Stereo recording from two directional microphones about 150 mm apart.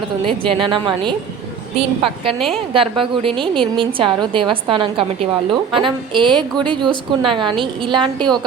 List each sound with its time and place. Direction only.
0.4 s a woman's voice: 35° right (ahead or behind)